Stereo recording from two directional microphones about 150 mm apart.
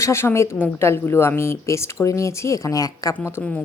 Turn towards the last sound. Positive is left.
turn(degrees=15)  # may be behind; listen again after turning